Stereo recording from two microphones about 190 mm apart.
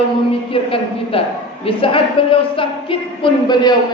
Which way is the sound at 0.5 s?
30° left (ahead or behind).